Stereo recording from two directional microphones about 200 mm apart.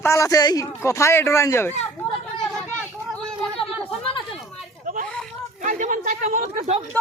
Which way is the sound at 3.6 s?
25° left (ahead or behind).